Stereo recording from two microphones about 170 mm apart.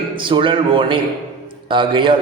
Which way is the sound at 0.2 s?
30° right (ahead or behind).